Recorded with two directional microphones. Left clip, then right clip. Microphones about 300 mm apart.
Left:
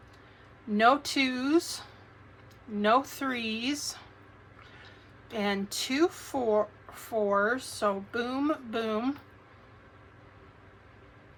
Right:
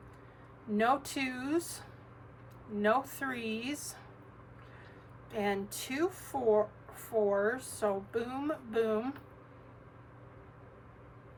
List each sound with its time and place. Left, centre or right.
0.8 s speech: centre
2.8 s speech: centre
5.3 s speech: centre